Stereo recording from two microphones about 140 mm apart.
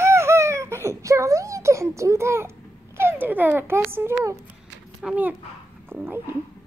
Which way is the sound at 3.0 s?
15° right (ahead or behind).